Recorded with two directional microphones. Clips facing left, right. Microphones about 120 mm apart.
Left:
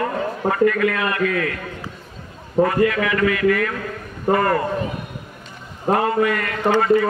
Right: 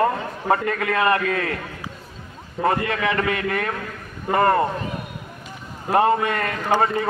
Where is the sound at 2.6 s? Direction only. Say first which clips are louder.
Left 4 dB; 30° right (ahead or behind).